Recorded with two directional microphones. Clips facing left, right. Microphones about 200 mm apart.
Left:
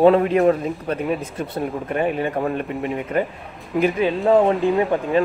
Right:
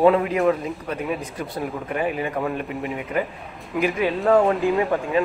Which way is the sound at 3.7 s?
Centre (ahead or behind).